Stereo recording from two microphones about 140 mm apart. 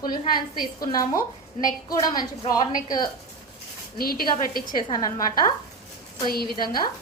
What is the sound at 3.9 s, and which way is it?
Speech, 90° left.